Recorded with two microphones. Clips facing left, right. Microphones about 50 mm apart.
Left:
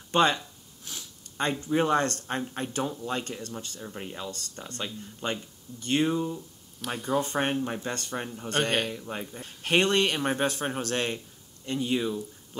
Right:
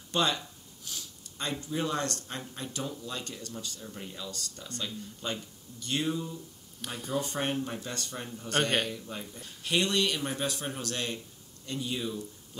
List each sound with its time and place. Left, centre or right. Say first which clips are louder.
0.1 s speech: left 6 dB; left
6.9 s speech: left 7 dB; centre
7.2 s speech: left 3 dB; left